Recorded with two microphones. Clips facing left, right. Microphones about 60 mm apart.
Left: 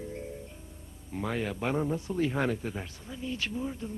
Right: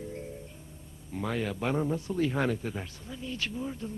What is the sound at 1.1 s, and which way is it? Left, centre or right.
Speech, centre.